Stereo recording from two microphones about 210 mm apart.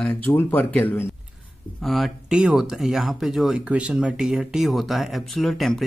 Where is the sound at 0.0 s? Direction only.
10° left (ahead or behind).